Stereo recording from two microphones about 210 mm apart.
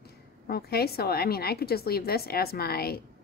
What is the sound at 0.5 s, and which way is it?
A woman's voice, 50° left (ahead or behind).